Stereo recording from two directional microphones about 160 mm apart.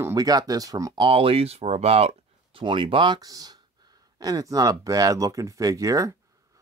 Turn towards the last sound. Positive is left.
turn(degrees=-20)  # may be behind; listen again after turning